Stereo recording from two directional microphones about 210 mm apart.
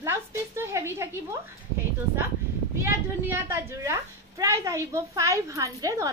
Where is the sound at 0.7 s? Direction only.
15° right (ahead or behind).